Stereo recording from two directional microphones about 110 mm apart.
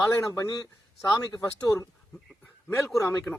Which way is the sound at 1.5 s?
25° left (ahead or behind).